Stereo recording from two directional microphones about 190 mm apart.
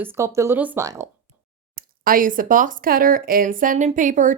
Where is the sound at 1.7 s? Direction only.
45° right (ahead or behind).